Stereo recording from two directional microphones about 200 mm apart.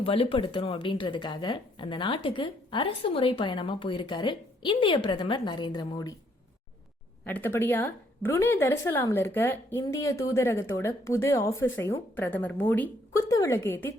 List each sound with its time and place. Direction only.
0.0 s speech: 25° left (ahead or behind)
7.3 s speech: 10° left (ahead or behind)